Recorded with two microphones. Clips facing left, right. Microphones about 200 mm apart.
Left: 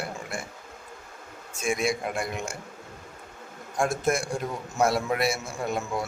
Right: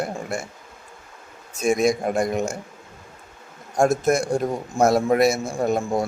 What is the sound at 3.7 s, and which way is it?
Speech, 40° right (ahead or behind).